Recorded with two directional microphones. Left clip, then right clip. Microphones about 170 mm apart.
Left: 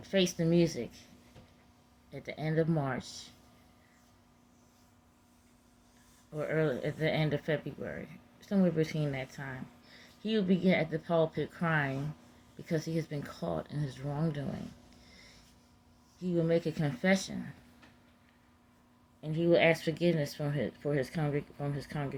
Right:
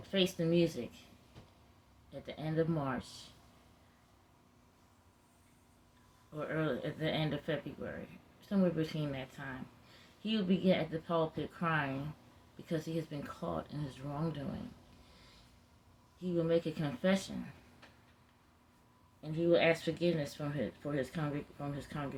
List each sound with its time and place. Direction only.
0.1 s speech: 35° left (ahead or behind)
2.2 s speech: 40° left (ahead or behind)
6.3 s speech: 40° left (ahead or behind)
16.2 s speech: 40° left (ahead or behind)
19.2 s speech: 45° left (ahead or behind)